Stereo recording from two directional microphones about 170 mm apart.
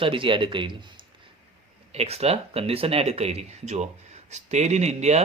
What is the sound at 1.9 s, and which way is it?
Speech, 40° right (ahead or behind).